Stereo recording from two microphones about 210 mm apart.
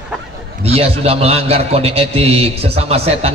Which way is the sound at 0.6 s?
30° right (ahead or behind).